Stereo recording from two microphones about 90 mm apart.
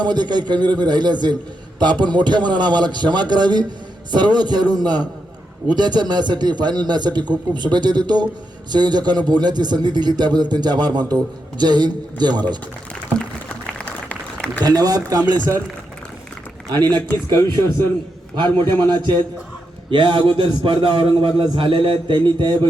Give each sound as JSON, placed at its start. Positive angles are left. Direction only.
{"t": 0.0, "sound": "a man's voice", "side_deg": -55}
{"t": 13.7, "sound": "a sound", "side_deg": 15}
{"t": 14.6, "sound": "a man's voice", "side_deg": -45}
{"t": 16.7, "sound": "a man's voice", "side_deg": -50}
{"t": 18.8, "sound": "a man's voice", "side_deg": -60}